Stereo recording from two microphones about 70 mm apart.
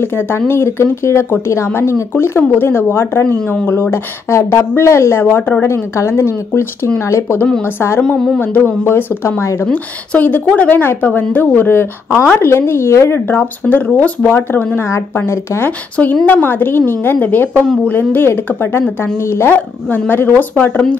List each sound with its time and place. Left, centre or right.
0.0 s speech: left
5.2 s a woman's voice: left
8.4 s a woman's voice: left
9.4 s speech: left
9.7 s a woman's voice: left
14.8 s speech: left
16.3 s a woman's voice: left
20.1 s a woman's voice: left